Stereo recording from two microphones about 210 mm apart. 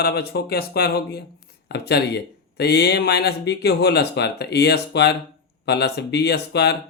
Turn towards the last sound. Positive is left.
turn(degrees=50)  # may be behind; listen again after turning